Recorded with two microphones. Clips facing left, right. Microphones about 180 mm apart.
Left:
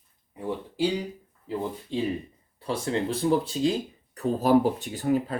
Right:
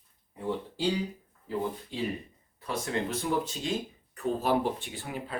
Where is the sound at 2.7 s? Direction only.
30° left (ahead or behind).